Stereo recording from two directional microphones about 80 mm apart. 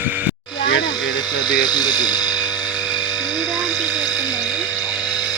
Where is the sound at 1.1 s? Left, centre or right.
Left.